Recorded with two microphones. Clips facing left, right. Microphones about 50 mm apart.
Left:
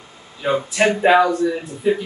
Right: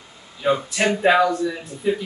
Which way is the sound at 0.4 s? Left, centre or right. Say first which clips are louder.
Left 2 dB; centre.